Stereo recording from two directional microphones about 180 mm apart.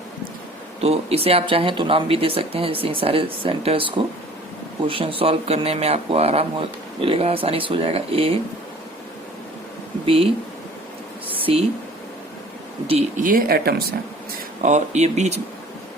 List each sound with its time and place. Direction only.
0.8 s speech: 35° right (ahead or behind)
11.3 s a sound: 30° right (ahead or behind)
12.9 s speech: 40° right (ahead or behind); by 13.8 s 55° right (ahead or behind)
14.6 s speech: 40° right (ahead or behind)